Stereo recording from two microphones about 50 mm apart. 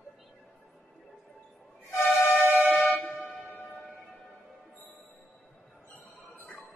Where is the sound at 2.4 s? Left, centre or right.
Right.